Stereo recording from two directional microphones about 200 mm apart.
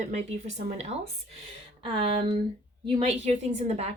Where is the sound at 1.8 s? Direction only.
25° right (ahead or behind).